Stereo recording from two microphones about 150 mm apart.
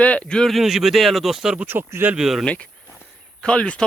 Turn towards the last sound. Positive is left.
turn(degrees=5)  # may be behind; listen again after turning